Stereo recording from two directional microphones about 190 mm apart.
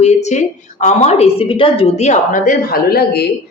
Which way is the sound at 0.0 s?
35° left (ahead or behind).